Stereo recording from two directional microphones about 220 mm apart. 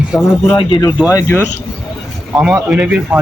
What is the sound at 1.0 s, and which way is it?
Speech, 10° left (ahead or behind).